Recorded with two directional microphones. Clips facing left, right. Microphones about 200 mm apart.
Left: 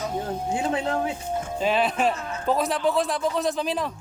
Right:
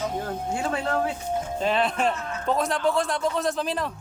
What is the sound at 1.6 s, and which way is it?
A man's voice, 5° left (ahead or behind).